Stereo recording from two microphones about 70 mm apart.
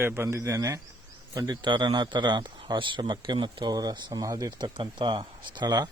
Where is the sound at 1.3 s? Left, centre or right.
Right.